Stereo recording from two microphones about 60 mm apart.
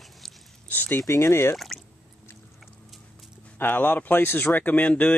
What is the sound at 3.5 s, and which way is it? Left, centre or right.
Speech, left.